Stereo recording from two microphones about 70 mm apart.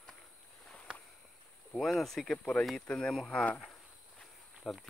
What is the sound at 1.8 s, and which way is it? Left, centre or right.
Speech, centre.